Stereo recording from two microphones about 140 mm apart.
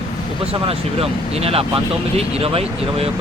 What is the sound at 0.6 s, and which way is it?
Speech, 45° right (ahead or behind).